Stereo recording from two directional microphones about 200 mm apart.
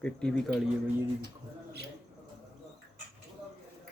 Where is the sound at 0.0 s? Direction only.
5° left (ahead or behind).